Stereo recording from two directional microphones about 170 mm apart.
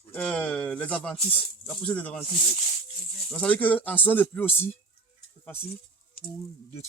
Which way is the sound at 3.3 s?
10° left (ahead or behind).